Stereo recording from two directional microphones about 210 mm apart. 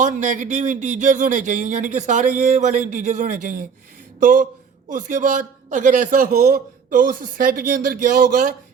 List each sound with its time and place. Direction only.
0.0 s a man's voice: 35° right (ahead or behind)